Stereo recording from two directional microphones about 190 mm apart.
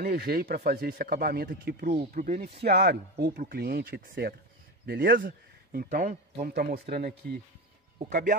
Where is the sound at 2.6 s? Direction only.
60° right (ahead or behind).